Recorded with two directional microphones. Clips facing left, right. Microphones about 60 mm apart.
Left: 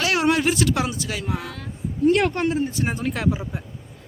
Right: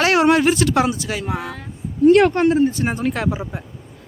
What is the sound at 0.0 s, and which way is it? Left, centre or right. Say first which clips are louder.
Speech: right 6 dB; right.